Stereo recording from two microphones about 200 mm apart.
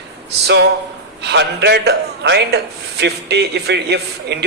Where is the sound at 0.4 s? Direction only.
60° right (ahead or behind).